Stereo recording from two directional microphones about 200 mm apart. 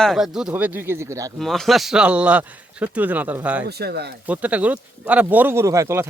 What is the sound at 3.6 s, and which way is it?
Speech, 55° right (ahead or behind).